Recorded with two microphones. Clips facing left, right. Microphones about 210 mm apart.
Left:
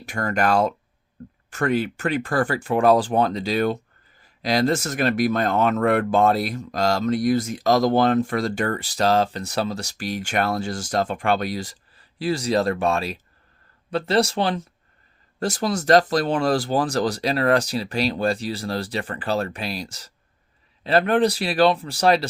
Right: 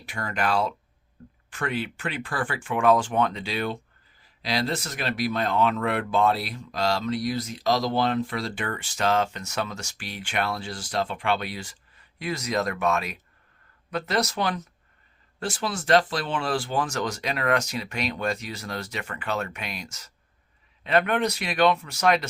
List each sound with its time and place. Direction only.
0.0 s speech: 45° left (ahead or behind); by 14.7 s 30° left (ahead or behind)
15.4 s speech: 40° left (ahead or behind)